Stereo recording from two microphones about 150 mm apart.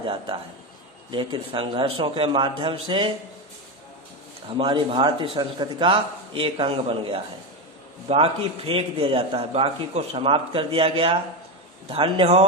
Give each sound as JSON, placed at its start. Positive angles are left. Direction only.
{"t": 0.0, "sound": "a man's voice", "side_deg": -35}
{"t": 4.4, "sound": "a man's voice", "side_deg": -35}